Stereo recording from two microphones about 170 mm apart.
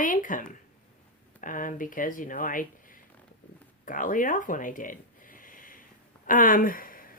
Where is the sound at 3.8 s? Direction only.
50° left (ahead or behind).